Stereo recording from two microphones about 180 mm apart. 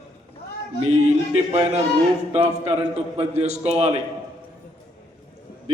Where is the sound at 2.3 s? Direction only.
35° right (ahead or behind).